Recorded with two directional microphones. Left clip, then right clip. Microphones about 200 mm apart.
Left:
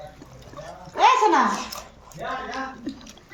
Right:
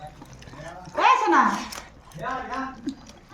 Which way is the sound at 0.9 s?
40° right (ahead or behind).